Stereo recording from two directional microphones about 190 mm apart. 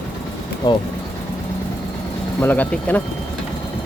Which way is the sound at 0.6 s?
20° left (ahead or behind).